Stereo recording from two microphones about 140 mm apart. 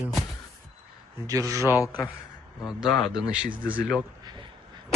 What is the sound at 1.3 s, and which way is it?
Speech, 25° right (ahead or behind).